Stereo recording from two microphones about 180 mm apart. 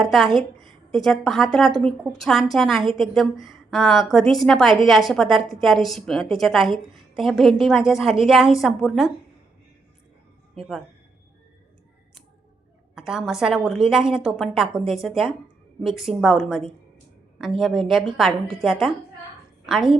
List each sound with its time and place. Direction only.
0.0 s a woman's voice: centre (ahead or behind)
10.5 s a woman's voice: centre (ahead or behind)
13.0 s a woman's voice: 5° right (ahead or behind)